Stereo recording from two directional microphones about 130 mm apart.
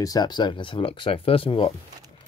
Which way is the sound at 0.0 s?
30° left (ahead or behind).